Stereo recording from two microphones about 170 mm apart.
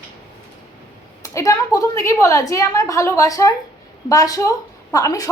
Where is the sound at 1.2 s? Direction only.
20° left (ahead or behind).